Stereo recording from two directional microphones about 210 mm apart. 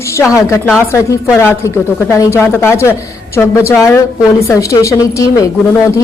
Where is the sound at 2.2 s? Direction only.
15° left (ahead or behind).